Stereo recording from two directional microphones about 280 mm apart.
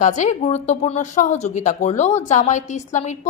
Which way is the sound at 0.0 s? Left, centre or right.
Left.